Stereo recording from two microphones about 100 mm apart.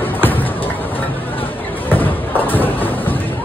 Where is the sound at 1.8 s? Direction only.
20° left (ahead or behind).